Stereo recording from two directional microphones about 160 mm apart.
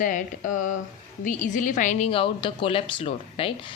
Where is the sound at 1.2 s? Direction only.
50° left (ahead or behind).